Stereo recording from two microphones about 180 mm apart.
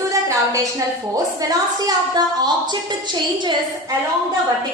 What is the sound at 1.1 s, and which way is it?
A woman's voice, 20° right (ahead or behind).